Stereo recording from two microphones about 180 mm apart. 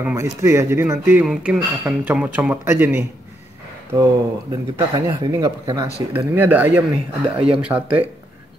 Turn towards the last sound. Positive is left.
turn(degrees=-5)  # may be behind; listen again after turning